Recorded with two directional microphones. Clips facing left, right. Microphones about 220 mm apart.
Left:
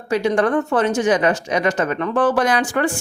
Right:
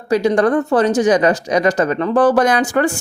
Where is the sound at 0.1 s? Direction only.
35° right (ahead or behind).